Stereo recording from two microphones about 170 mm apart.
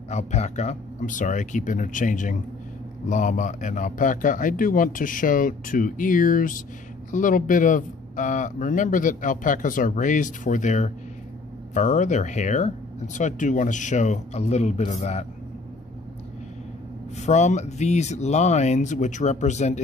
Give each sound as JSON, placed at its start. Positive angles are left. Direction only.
{"t": 0.1, "sound": "speech", "side_deg": 40}
{"t": 17.2, "sound": "speech", "side_deg": 45}